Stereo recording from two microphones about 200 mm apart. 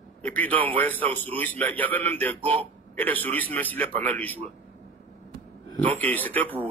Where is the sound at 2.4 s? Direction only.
25° right (ahead or behind).